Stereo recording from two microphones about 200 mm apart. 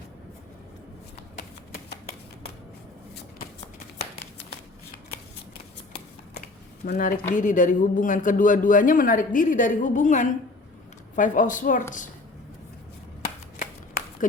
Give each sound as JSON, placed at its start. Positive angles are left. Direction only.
{"t": 1.4, "sound": "shuffling cards", "side_deg": 50}
{"t": 6.8, "sound": "speech", "side_deg": 45}
{"t": 13.2, "sound": "shuffling cards", "side_deg": 45}